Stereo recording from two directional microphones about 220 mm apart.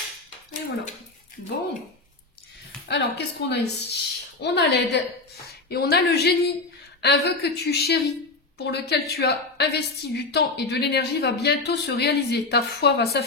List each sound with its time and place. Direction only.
2.9 s a woman's voice: 50° left (ahead or behind)